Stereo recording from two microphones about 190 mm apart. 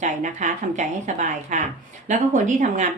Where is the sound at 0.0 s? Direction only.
40° right (ahead or behind).